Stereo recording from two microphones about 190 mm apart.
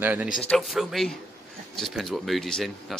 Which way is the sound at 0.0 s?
10° right (ahead or behind).